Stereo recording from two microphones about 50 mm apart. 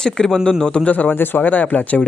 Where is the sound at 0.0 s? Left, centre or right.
Centre.